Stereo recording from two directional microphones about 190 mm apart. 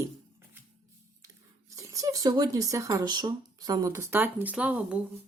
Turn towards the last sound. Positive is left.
turn(degrees=-5)  # may be behind; listen again after turning